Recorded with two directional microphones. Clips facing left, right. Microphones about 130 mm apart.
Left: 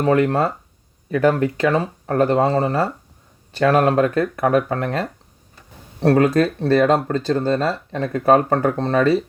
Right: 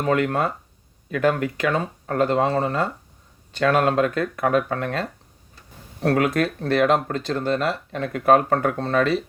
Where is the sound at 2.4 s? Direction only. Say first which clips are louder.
Left 3 dB; 35° left (ahead or behind).